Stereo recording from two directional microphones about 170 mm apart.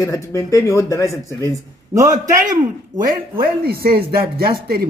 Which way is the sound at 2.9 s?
50° right (ahead or behind).